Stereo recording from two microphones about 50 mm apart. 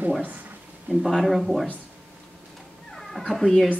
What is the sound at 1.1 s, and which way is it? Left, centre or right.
Speech, centre.